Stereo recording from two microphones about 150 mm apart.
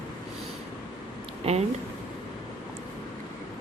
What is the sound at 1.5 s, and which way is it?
Speech, 45° right (ahead or behind).